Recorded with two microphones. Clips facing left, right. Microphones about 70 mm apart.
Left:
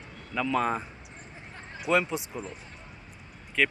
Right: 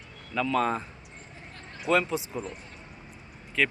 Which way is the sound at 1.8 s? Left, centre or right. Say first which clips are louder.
Right 1 dB; centre.